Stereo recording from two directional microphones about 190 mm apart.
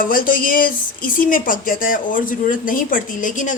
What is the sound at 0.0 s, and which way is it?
A woman's voice, 45° left (ahead or behind).